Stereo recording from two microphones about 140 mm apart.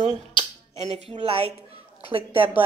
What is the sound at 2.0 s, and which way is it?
Speech, 40° right (ahead or behind).